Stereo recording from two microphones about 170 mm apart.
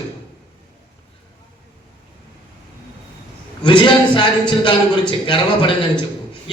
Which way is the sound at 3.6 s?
30° left (ahead or behind).